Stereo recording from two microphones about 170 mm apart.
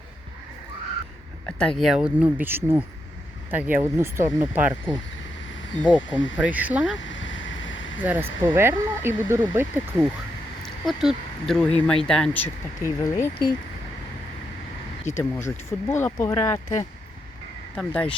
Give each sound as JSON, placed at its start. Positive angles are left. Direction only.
{"t": 1.5, "sound": "speech", "side_deg": 5}
{"t": 5.8, "sound": "speech", "side_deg": 25}
{"t": 6.3, "sound": "speech", "side_deg": -10}
{"t": 6.9, "sound": "a sound", "side_deg": 90}
{"t": 8.0, "sound": "speech", "side_deg": -10}
{"t": 10.8, "sound": "speech", "side_deg": 0}
{"t": 15.0, "sound": "speech", "side_deg": 15}
{"t": 17.7, "sound": "speech", "side_deg": 5}